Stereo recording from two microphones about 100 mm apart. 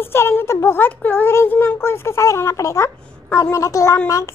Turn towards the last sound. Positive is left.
turn(degrees=35)  # may be behind; listen again after turning